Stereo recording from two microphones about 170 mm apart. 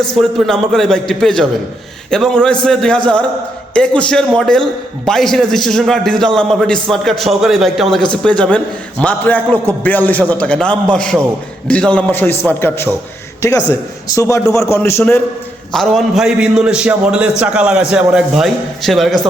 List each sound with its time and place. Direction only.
0.1 s a man's voice: centre (ahead or behind)
15.7 s a man's voice: centre (ahead or behind)